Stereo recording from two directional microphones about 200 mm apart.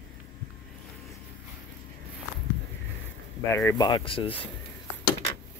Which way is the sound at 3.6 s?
20° left (ahead or behind).